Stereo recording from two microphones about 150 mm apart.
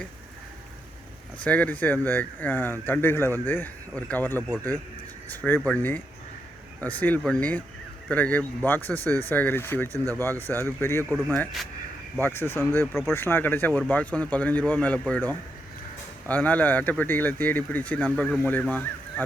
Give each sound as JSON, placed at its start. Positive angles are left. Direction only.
{"t": 1.5, "sound": "speech", "side_deg": 10}
{"t": 5.5, "sound": "speech", "side_deg": 10}
{"t": 12.2, "sound": "speech", "side_deg": 15}